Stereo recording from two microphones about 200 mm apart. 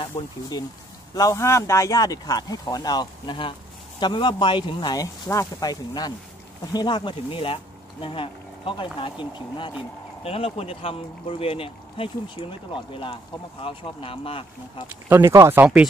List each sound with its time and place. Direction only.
0.1 s speech: 20° left (ahead or behind)
15.0 s speech: 10° right (ahead or behind)